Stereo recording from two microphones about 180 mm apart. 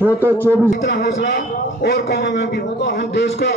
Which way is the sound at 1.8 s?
65° left (ahead or behind).